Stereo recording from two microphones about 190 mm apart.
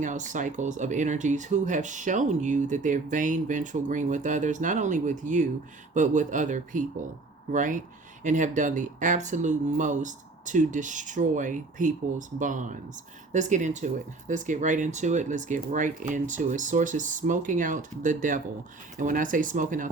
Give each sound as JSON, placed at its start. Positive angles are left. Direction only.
{"t": 0.0, "sound": "speech", "side_deg": -40}